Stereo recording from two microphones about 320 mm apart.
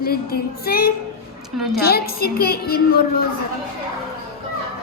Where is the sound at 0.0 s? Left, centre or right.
Left.